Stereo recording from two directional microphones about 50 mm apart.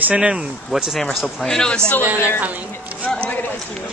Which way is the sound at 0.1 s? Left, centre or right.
Right.